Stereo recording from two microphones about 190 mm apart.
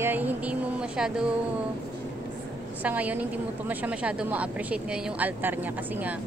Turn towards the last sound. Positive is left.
turn(degrees=-10)  # may be behind; listen again after turning